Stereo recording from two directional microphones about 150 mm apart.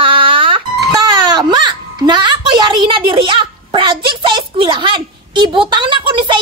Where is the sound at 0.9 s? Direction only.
25° right (ahead or behind).